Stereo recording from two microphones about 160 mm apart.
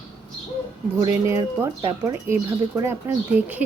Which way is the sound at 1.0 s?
20° right (ahead or behind).